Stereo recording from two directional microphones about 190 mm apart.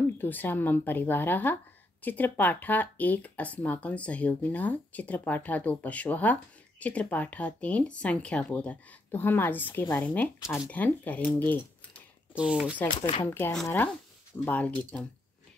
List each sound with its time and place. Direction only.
0.0 s speech: 10° left (ahead or behind)
12.4 s speech: 5° right (ahead or behind)
13.0 s speech: 25° left (ahead or behind)
13.3 s speech: 10° left (ahead or behind)